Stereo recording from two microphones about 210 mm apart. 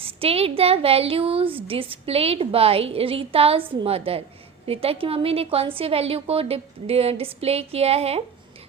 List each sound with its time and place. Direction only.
0.0 s speech: 25° right (ahead or behind)